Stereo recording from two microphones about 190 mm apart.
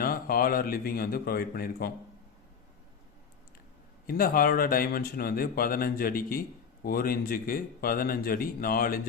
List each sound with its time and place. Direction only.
0.0 s speech: 50° left (ahead or behind)
4.0 s speech: 50° left (ahead or behind)